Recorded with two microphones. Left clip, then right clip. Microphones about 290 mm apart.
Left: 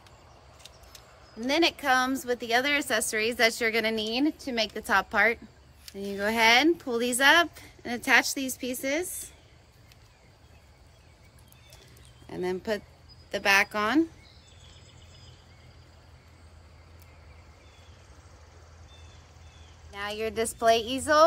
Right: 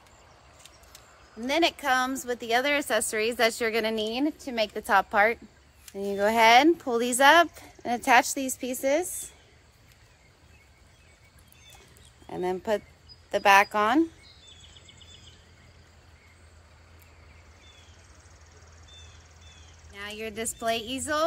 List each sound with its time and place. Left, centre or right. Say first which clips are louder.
1.4 s a woman's voice: even; centre
12.3 s speech: right 3 dB; centre
19.9 s speech: left 4 dB; centre